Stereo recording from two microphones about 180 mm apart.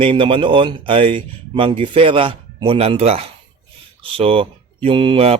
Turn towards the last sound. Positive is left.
turn(degrees=-35)  # may be behind; listen again after turning